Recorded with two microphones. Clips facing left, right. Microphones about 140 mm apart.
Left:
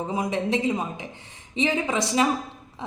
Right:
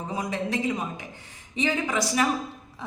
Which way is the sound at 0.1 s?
20° left (ahead or behind).